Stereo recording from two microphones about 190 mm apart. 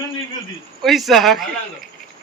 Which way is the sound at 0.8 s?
Centre (ahead or behind).